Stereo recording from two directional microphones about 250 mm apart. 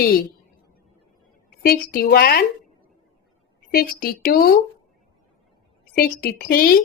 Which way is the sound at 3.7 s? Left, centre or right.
Left.